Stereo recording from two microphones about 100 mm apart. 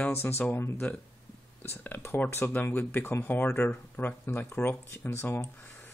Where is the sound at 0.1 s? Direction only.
25° left (ahead or behind).